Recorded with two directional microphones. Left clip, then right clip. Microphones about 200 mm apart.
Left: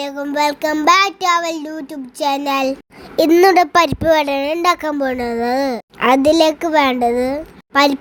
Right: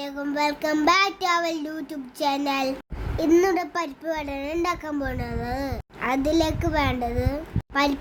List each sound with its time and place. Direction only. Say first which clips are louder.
0.0 s child singing: left 8 dB; 35° left (ahead or behind)
3.2 s a woman's voice: left 10 dB; 35° left (ahead or behind)